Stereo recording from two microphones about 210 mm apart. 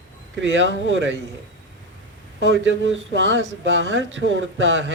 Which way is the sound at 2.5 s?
60° right (ahead or behind).